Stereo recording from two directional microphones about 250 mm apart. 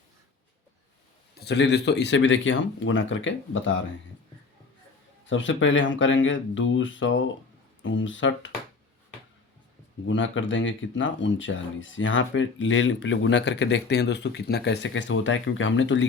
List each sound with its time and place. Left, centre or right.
1.4 s speech: left
5.2 s speech: left
10.1 s speech: left